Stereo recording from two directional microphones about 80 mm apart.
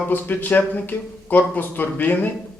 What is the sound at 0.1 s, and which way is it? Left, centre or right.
Speech, left.